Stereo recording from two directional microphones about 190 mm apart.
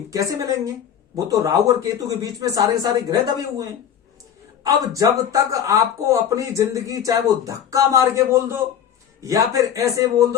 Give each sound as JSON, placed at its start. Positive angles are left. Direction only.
{"t": 0.1, "sound": "speech", "side_deg": -15}